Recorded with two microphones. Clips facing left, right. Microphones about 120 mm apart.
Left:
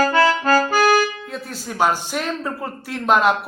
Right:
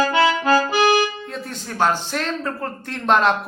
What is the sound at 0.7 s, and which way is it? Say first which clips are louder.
Accordion: left 1 dB; 45° left (ahead or behind).